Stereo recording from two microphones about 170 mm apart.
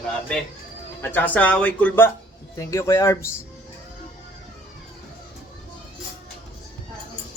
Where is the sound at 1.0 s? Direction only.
10° left (ahead or behind).